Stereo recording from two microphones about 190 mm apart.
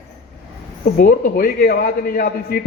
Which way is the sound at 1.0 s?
50° left (ahead or behind).